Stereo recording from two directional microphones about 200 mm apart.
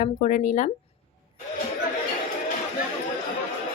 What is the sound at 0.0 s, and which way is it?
Speech, 40° left (ahead or behind).